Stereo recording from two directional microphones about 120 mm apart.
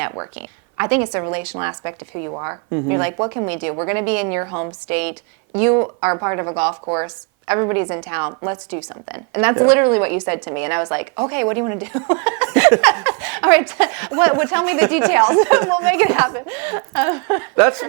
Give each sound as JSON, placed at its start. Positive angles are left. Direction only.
{"t": 0.8, "sound": "a woman's voice", "side_deg": -25}